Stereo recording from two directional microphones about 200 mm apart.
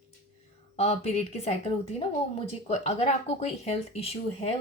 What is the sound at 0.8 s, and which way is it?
Speech, 35° left (ahead or behind).